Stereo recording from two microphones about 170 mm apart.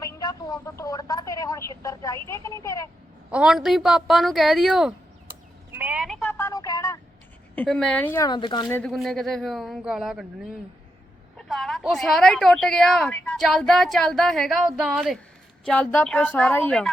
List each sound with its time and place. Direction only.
0.0 s telephone: 20° left (ahead or behind)
3.3 s a woman's voice: 5° right (ahead or behind)
5.7 s a sound: 10° right (ahead or behind)
6.1 s a sound: 5° left (ahead or behind)
7.5 s a woman's voice: 5° left (ahead or behind)
8.3 s speech: 25° left (ahead or behind)
8.7 s a woman's voice: 5° left (ahead or behind)
15.6 s a woman's voice: 10° left (ahead or behind)